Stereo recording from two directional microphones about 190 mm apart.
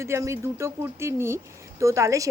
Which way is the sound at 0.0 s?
15° right (ahead or behind).